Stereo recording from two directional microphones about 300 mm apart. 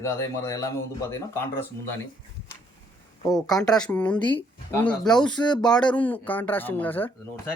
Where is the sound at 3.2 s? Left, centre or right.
Centre.